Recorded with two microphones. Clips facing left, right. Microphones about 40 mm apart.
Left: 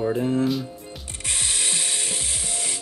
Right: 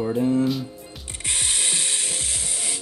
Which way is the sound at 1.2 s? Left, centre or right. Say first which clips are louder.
Right 1 dB; centre.